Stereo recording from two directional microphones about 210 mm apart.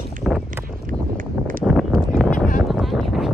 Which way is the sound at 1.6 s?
Centre (ahead or behind).